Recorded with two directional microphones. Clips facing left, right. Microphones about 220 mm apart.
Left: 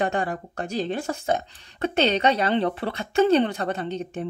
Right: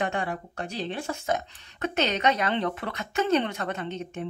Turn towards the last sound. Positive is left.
turn(degrees=35)  # may be behind; listen again after turning